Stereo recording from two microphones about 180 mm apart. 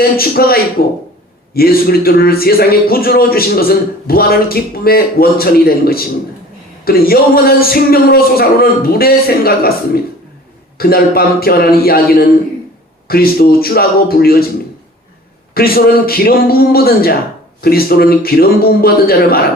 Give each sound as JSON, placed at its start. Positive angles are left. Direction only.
{"t": 0.2, "sound": "a man's voice", "side_deg": 55}
{"t": 15.5, "sound": "a man's voice", "side_deg": 55}